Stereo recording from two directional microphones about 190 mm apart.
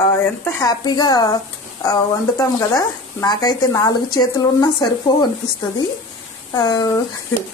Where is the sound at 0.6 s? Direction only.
20° left (ahead or behind).